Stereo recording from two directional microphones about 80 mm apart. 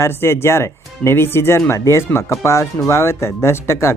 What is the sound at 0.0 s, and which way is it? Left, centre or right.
Speech, left.